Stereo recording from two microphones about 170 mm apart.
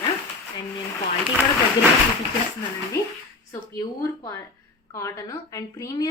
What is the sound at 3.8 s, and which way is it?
A woman's voice, 15° left (ahead or behind).